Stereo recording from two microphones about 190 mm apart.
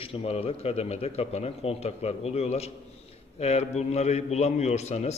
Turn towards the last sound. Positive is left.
turn(degrees=35)  # may be behind; listen again after turning